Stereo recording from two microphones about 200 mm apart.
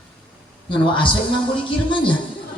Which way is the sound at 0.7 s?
25° left (ahead or behind).